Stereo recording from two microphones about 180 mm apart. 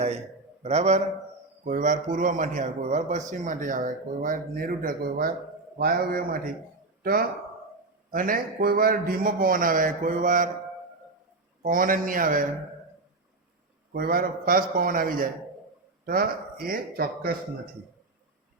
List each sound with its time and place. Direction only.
0.6 s a man's voice: 40° right (ahead or behind)
11.6 s a man's voice: 50° right (ahead or behind)
13.9 s a man's voice: 55° right (ahead or behind)